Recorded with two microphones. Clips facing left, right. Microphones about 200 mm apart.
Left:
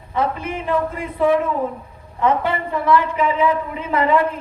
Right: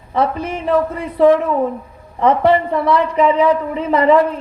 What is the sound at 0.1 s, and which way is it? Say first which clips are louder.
Speech: right 4 dB; 35° right (ahead or behind).